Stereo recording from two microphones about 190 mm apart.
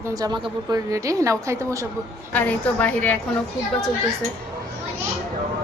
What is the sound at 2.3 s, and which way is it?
Speech, 5° left (ahead or behind).